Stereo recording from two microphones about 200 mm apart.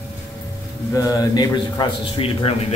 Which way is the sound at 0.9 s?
15° left (ahead or behind).